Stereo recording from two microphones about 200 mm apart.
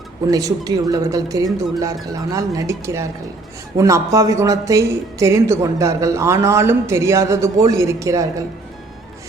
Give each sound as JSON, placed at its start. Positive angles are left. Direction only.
{"t": 0.3, "sound": "speech", "side_deg": -15}